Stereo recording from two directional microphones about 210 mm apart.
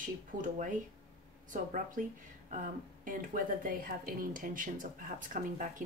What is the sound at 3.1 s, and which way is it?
Speech, 40° right (ahead or behind).